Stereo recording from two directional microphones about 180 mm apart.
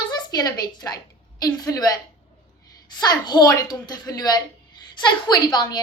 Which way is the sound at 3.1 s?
25° left (ahead or behind).